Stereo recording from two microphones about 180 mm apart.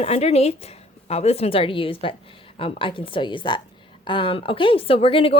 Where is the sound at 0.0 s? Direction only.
35° left (ahead or behind).